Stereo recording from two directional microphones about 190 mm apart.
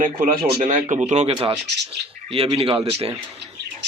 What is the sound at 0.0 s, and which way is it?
Speech, 45° right (ahead or behind).